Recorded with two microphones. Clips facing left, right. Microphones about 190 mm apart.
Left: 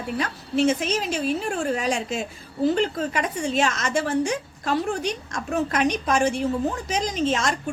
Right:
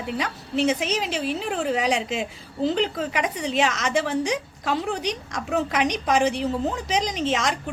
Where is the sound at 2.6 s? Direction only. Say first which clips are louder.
Left 2 dB; 15° right (ahead or behind).